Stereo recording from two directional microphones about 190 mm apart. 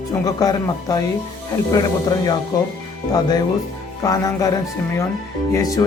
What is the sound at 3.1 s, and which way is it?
Speech, 20° left (ahead or behind).